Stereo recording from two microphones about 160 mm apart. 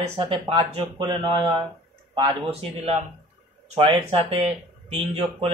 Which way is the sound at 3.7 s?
35° right (ahead or behind).